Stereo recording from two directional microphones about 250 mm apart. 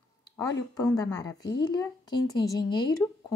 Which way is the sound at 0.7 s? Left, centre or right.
Centre.